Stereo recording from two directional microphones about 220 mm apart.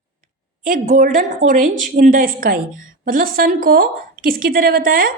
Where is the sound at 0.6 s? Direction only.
35° right (ahead or behind).